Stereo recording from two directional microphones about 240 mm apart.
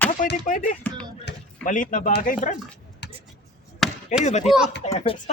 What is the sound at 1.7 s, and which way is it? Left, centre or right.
Speech, left.